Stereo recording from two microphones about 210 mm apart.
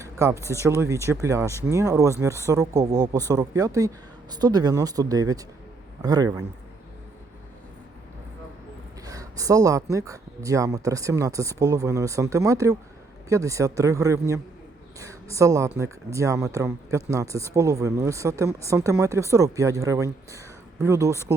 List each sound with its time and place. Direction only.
0.0 s a sound: 15° right (ahead or behind)
0.6 s speech: 15° right (ahead or behind)
9.0 s speech: 15° right (ahead or behind)